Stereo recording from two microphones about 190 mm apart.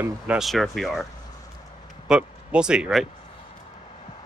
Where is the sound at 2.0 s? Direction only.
5° right (ahead or behind).